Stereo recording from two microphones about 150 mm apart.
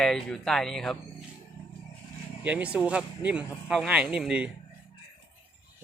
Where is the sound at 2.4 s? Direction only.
10° right (ahead or behind).